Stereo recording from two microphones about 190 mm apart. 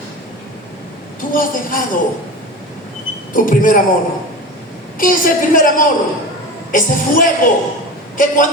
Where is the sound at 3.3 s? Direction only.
45° left (ahead or behind).